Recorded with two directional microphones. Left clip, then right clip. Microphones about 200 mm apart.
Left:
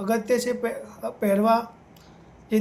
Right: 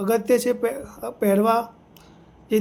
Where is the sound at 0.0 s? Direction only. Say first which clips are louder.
Right 4 dB; 55° right (ahead or behind).